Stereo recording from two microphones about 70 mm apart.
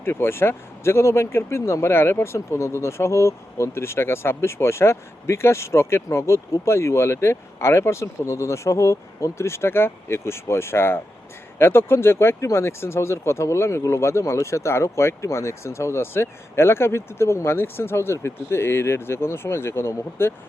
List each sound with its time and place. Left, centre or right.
0.0 s speech: left